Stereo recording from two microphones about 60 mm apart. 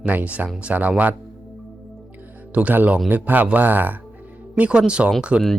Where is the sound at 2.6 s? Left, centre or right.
Right.